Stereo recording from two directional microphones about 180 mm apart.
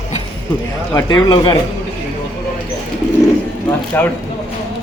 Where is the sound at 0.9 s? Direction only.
25° left (ahead or behind).